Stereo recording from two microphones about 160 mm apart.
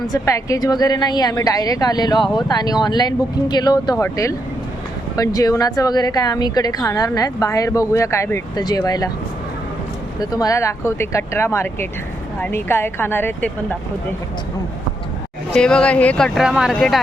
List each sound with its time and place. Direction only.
0.1 s a woman's voice: 20° left (ahead or behind)
10.2 s speech: 20° left (ahead or behind)
15.5 s speech: 5° left (ahead or behind)